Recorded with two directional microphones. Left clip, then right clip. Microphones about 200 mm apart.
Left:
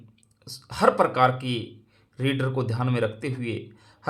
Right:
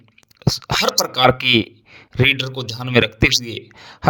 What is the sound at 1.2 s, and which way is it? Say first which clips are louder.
A man's voice: right 9 dB; 45° right (ahead or behind).